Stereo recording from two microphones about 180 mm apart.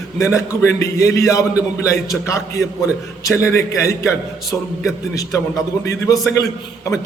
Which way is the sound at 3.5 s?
15° left (ahead or behind).